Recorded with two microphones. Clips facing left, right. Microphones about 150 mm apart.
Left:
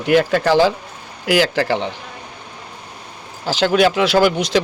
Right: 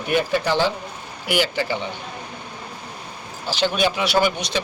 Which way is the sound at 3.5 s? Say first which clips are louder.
Left 6 dB; 90° left.